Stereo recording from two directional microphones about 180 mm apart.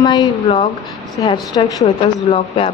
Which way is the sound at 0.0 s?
20° left (ahead or behind).